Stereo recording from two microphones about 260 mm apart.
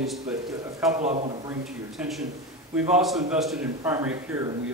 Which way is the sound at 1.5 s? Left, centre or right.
Centre.